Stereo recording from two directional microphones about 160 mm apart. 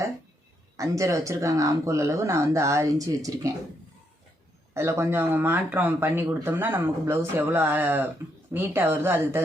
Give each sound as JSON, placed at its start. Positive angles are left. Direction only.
{"t": 0.8, "sound": "speech", "side_deg": -20}
{"t": 4.7, "sound": "speech", "side_deg": -15}